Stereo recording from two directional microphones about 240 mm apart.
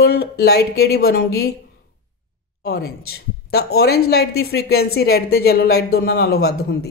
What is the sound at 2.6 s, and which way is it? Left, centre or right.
Speech, left.